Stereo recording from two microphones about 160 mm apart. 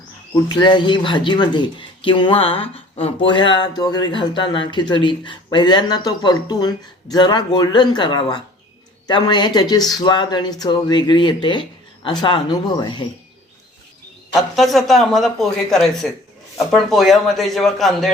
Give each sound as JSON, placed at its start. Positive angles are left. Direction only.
{"t": 0.4, "sound": "speech", "side_deg": 25}
{"t": 14.3, "sound": "speech", "side_deg": 0}